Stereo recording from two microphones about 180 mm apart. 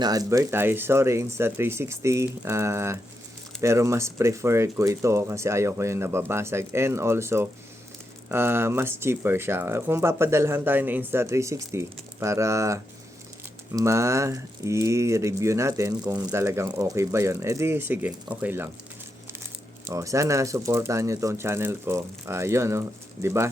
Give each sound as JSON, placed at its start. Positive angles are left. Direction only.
{"t": 0.0, "sound": "speech", "side_deg": -20}
{"t": 19.9, "sound": "speech", "side_deg": -15}